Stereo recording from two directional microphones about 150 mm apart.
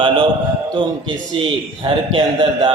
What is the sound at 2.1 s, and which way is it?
Speech, 35° right (ahead or behind).